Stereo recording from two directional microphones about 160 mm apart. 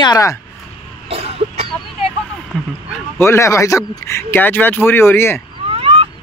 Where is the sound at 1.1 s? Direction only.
40° right (ahead or behind).